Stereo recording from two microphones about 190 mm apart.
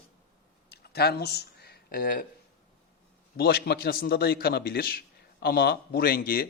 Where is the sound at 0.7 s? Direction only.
55° left (ahead or behind).